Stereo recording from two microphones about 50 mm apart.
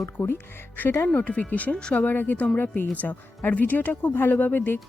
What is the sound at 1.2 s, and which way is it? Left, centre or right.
Speech, left.